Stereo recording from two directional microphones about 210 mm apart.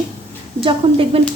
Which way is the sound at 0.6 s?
25° right (ahead or behind).